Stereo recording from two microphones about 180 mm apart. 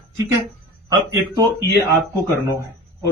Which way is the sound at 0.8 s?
20° right (ahead or behind).